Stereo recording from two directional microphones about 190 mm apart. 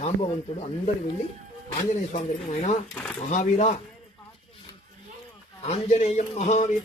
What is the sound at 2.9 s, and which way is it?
Speech, 5° left (ahead or behind).